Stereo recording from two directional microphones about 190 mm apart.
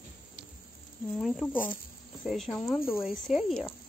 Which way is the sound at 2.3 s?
Centre (ahead or behind).